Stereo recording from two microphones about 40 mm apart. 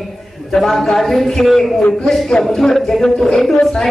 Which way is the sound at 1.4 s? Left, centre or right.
Centre.